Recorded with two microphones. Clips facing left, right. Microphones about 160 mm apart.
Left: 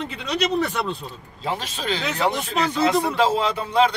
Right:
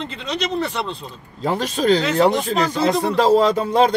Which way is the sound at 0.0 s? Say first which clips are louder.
Left 1 dB; 5° left (ahead or behind).